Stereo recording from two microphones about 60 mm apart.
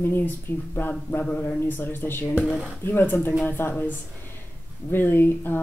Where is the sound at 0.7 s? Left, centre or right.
Left.